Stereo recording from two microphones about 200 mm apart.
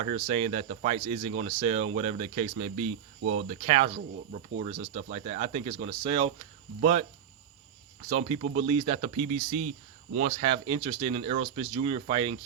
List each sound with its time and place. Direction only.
0.0 s speech: 30° right (ahead or behind)
3.9 s speech: 50° right (ahead or behind)
4.6 s speech: 30° right (ahead or behind)
8.1 s speech: 30° right (ahead or behind)